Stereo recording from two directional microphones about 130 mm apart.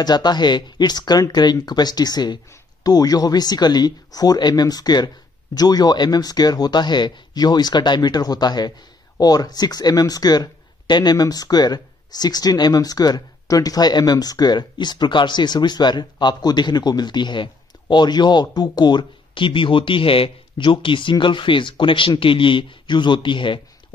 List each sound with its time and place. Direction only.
0.0 s speech: 35° left (ahead or behind)